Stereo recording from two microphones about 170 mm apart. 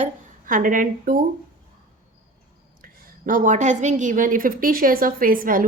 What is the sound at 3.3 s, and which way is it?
A woman's voice, 50° right (ahead or behind).